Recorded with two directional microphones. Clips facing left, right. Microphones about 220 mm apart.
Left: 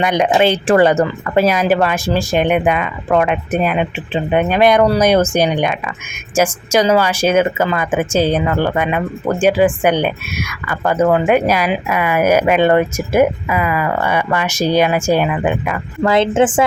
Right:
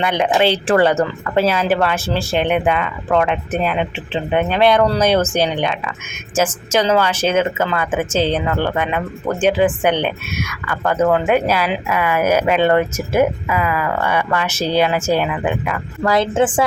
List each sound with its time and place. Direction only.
0.0 s a woman's voice: 15° left (ahead or behind)